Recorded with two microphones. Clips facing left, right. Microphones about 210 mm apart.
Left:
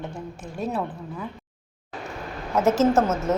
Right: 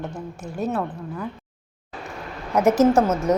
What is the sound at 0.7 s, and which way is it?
Speech, centre (ahead or behind).